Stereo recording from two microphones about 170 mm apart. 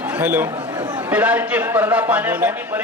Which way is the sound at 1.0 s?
10° right (ahead or behind).